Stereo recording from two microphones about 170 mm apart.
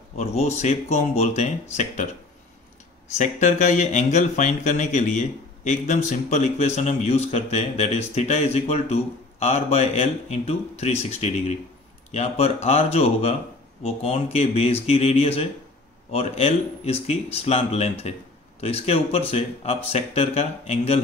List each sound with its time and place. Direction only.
0.2 s speech: 40° left (ahead or behind)
3.2 s speech: 45° left (ahead or behind)